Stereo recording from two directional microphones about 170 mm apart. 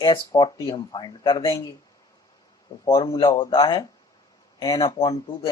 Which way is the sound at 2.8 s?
20° left (ahead or behind).